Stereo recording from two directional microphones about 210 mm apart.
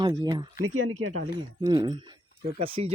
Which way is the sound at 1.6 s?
20° right (ahead or behind).